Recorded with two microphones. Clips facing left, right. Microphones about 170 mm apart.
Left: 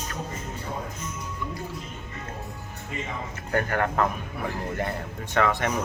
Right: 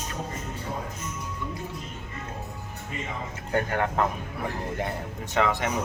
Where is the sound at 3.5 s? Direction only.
20° right (ahead or behind).